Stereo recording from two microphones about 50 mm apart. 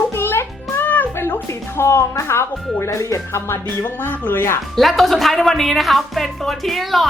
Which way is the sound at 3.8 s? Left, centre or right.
Left.